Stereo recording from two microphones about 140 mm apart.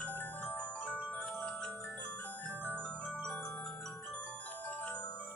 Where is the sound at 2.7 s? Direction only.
10° left (ahead or behind).